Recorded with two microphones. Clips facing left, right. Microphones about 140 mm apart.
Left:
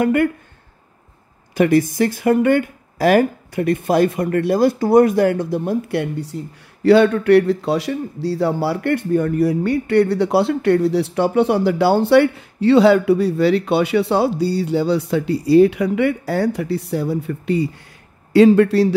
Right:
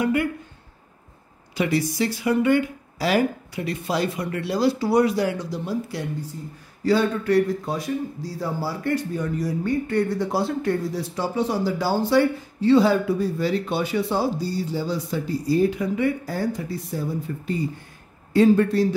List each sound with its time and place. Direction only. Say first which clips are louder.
0.0 s speech: left 6 dB; 55° left (ahead or behind)
1.5 s speech: left 8 dB; 50° left (ahead or behind); by 18.9 s 70° left (ahead or behind)